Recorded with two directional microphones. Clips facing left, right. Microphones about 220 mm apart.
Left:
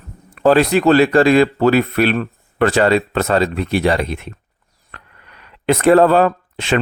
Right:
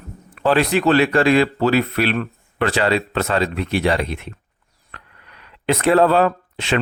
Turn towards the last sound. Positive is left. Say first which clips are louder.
# left 3 dB
turn(degrees=50)  # may be behind; listen again after turning